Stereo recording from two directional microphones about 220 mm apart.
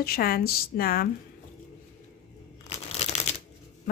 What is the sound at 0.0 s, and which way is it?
A woman's voice, 45° left (ahead or behind).